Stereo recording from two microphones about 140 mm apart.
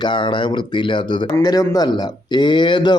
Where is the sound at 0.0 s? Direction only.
35° left (ahead or behind).